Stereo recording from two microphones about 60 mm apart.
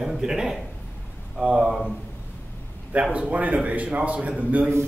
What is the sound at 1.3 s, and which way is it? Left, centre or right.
Speech, centre.